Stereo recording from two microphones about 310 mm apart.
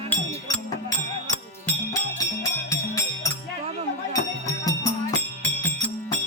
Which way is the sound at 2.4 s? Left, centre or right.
Centre.